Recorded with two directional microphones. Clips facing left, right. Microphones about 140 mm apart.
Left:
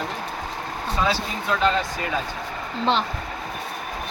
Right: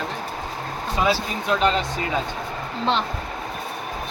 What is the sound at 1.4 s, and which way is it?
Speech, 20° right (ahead or behind).